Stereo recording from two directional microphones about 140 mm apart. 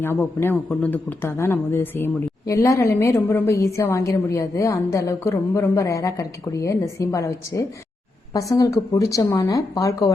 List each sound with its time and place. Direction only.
0.0 s a man's voice: 15° left (ahead or behind)